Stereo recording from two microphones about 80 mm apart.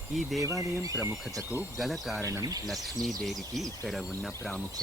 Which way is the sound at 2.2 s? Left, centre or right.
Right.